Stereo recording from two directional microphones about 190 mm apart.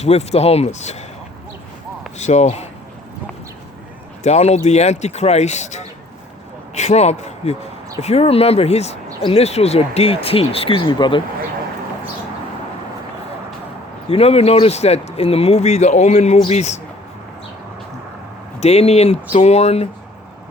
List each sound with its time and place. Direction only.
0.0 s speech: 35° left (ahead or behind)
2.1 s speech: 35° left (ahead or behind)
4.2 s speech: 35° left (ahead or behind)
14.1 s speech: 30° left (ahead or behind)
18.6 s speech: 35° left (ahead or behind)